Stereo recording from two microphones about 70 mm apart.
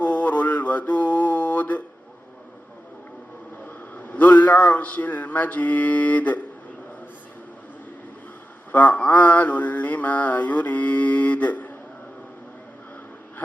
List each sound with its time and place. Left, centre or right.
0.0 s mantra: centre
3.9 s mantra: left
8.7 s mantra: left